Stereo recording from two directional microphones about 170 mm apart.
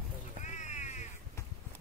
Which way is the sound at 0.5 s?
45° left (ahead or behind).